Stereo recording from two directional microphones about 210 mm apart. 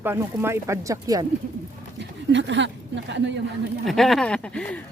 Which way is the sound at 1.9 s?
60° right (ahead or behind).